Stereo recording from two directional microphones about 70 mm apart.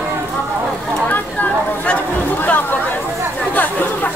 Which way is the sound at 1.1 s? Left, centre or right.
Left.